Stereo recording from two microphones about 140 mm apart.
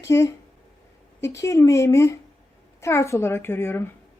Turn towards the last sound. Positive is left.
turn(degrees=15)  # may be behind; listen again after turning